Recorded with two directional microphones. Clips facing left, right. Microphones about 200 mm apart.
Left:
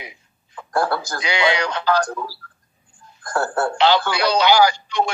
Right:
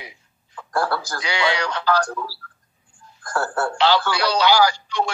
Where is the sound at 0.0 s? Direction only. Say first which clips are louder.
Left 2 dB; 20° left (ahead or behind).